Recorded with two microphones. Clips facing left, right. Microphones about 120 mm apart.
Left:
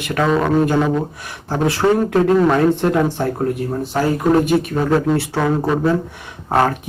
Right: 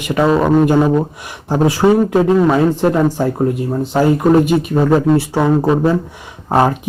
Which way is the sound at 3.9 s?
20° right (ahead or behind).